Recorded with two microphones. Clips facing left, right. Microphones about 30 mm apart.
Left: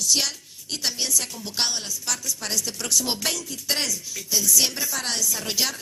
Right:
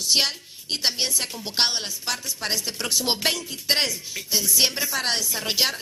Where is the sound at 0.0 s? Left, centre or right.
Right.